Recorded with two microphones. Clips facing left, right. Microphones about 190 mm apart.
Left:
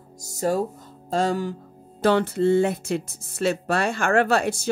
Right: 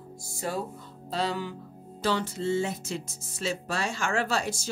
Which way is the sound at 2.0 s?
60° left (ahead or behind).